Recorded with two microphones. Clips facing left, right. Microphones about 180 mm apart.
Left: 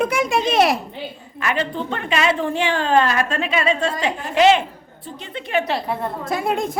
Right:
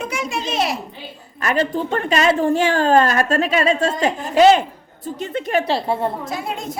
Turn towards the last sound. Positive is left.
turn(degrees=55)  # may be behind; listen again after turning